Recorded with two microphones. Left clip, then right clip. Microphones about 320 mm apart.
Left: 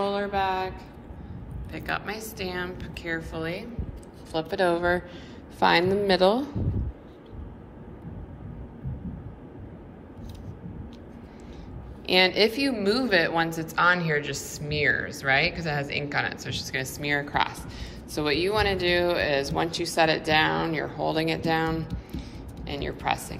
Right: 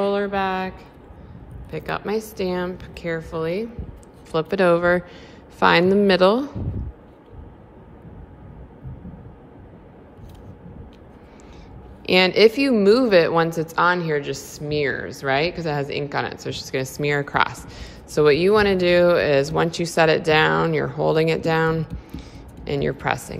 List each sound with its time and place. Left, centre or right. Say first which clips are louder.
0.0 s a sound: right 4 dB; right
1.7 s a woman's voice: right 6 dB; centre
12.1 s a woman's voice: right 6 dB; right